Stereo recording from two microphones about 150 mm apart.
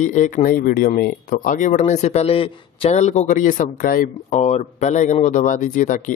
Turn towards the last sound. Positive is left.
turn(degrees=60)  # may be behind; listen again after turning